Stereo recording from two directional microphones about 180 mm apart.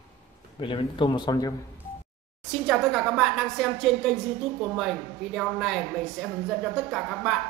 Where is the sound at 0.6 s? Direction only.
30° left (ahead or behind).